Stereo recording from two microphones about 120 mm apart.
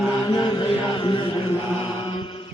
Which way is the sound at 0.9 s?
50° left (ahead or behind).